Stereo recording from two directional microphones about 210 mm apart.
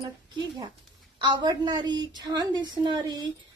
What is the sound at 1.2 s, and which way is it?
A woman's voice, 20° right (ahead or behind).